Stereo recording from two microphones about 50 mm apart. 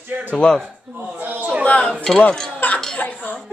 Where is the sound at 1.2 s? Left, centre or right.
Right.